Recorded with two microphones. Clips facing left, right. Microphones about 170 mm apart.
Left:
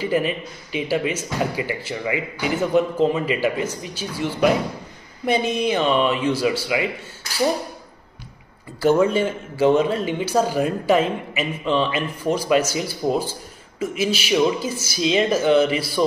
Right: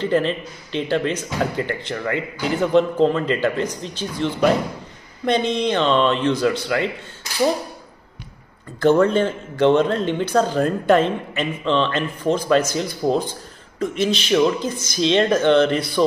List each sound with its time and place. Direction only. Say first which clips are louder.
0.0 s speech: right 2 dB; 10° left (ahead or behind)
8.7 s speech: right 2 dB; 10° left (ahead or behind)